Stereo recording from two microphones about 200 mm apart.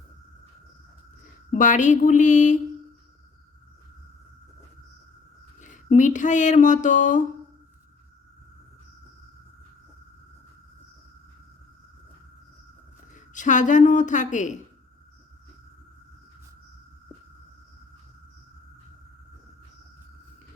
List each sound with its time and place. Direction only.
1.5 s a woman's voice: 40° left (ahead or behind)
5.5 s speech: 40° left (ahead or behind)
13.1 s a woman's voice: 40° left (ahead or behind)